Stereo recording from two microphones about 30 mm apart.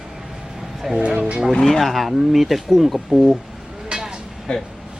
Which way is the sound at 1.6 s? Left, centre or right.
Centre.